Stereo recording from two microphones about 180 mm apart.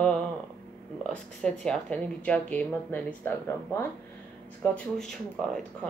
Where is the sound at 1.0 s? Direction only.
5° left (ahead or behind).